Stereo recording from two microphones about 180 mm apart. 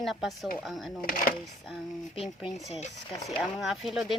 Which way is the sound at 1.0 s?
50° left (ahead or behind).